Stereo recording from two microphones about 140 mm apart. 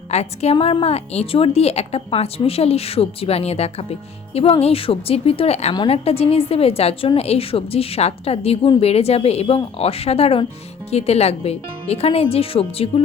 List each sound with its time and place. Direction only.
0.1 s a woman's voice: 50° left (ahead or behind)